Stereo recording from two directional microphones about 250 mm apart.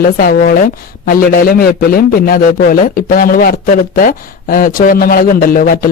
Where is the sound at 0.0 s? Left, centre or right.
Left.